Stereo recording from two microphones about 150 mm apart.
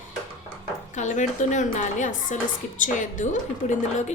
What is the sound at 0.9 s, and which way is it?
A woman's voice, 55° left (ahead or behind).